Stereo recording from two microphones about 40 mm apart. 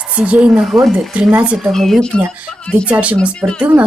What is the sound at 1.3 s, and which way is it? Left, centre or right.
Speech, right.